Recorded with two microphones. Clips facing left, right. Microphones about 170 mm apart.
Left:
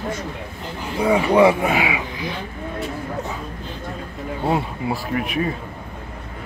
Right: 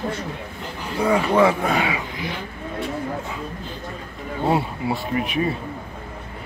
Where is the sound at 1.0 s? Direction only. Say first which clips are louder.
Left 3 dB; 15° left (ahead or behind).